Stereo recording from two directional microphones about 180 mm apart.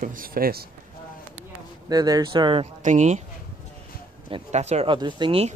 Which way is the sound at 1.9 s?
20° right (ahead or behind).